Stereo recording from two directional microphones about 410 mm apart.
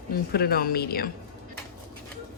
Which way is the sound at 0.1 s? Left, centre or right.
Left.